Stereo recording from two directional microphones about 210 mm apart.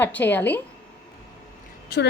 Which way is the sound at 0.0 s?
10° left (ahead or behind).